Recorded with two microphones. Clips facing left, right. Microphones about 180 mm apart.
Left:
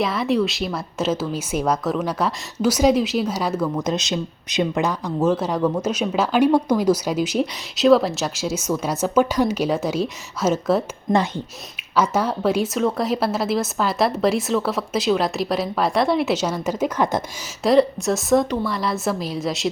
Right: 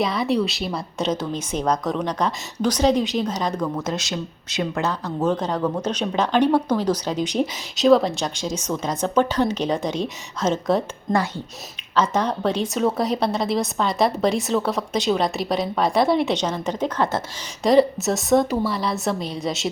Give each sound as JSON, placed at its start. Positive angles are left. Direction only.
{"t": 0.0, "sound": "a woman's voice", "side_deg": 0}
{"t": 3.8, "sound": "speech", "side_deg": 20}
{"t": 11.1, "sound": "speech", "side_deg": 20}
{"t": 11.9, "sound": "a woman's voice", "side_deg": 10}
{"t": 17.6, "sound": "a woman's voice", "side_deg": 0}